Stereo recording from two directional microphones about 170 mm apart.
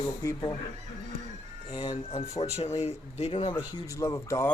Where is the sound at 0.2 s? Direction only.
20° left (ahead or behind).